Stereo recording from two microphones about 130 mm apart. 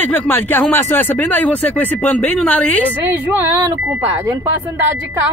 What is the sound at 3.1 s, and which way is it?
Speech, 15° right (ahead or behind).